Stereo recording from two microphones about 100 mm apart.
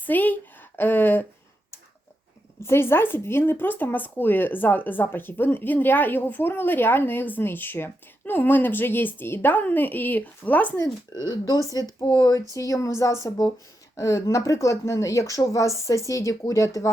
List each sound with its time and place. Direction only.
0.0 s a woman's voice: 15° left (ahead or behind)
2.6 s speech: 25° left (ahead or behind)
11.1 s speech: 45° left (ahead or behind)